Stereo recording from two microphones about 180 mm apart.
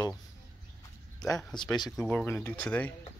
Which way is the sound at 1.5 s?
25° left (ahead or behind).